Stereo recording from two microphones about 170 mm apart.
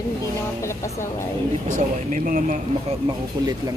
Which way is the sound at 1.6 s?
45° right (ahead or behind).